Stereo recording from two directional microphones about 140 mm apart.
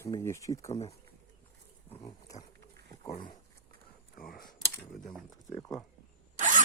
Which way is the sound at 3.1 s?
35° left (ahead or behind).